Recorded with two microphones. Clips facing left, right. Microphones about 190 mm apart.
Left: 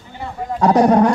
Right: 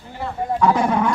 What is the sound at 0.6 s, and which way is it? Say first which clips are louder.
Speech: left 6 dB; 40° left (ahead or behind).